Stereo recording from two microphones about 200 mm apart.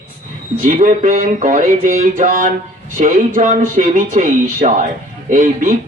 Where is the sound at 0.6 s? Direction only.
40° right (ahead or behind).